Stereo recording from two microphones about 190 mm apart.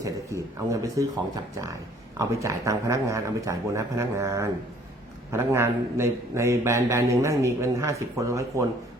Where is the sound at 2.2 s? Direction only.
15° right (ahead or behind).